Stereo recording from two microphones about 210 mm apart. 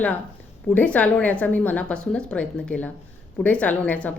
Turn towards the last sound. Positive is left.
turn(degrees=5)  # may be behind; listen again after turning